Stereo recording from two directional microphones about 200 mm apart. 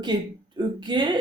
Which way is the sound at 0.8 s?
25° right (ahead or behind).